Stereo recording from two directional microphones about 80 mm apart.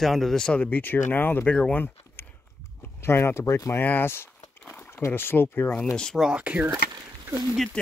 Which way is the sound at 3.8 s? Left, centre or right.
Left.